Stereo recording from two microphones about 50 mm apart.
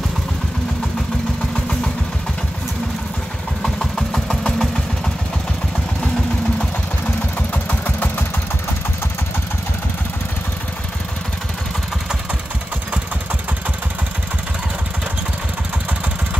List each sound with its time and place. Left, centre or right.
3.6 s engine: centre
7.3 s engine: left